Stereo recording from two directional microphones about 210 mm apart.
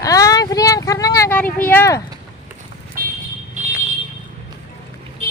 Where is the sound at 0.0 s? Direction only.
15° left (ahead or behind).